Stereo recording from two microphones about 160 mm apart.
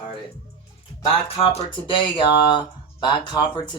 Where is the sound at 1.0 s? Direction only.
35° left (ahead or behind).